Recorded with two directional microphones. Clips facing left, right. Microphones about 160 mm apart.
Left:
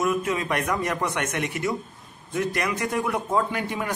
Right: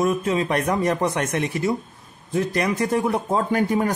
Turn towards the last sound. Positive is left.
turn(degrees=-40)  # may be behind; listen again after turning